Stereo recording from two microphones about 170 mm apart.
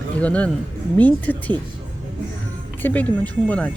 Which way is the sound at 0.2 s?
5° left (ahead or behind).